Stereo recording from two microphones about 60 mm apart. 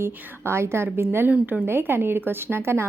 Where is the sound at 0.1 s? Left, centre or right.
Right.